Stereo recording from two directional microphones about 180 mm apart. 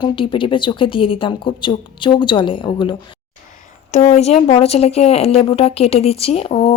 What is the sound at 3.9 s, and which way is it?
Speech, 40° left (ahead or behind).